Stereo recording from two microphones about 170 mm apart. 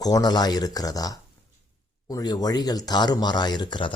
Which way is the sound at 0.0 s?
25° left (ahead or behind).